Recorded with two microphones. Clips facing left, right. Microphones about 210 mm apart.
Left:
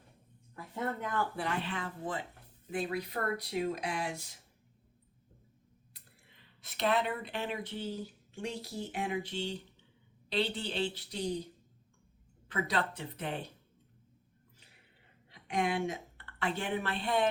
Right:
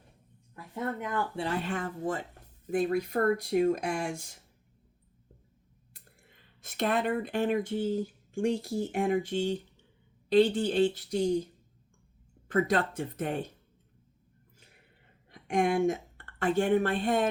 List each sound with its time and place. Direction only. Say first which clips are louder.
1.5 s speech: right 4 dB; 45° right (ahead or behind)
6.6 s speech: right 2 dB; 45° right (ahead or behind)
12.5 s speech: right 7 dB; 50° right (ahead or behind)
15.3 s speech: right 6 dB; 45° right (ahead or behind)